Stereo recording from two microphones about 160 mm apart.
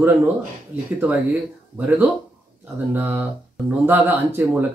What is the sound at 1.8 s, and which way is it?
Speech, 10° right (ahead or behind).